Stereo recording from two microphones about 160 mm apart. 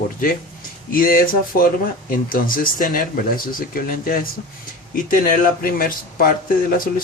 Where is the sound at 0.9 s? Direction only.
60° left (ahead or behind).